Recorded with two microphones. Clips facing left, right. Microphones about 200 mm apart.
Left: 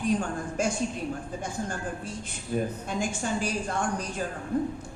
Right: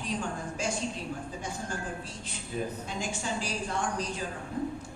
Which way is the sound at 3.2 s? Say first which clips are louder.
Left 4 dB; 55° left (ahead or behind).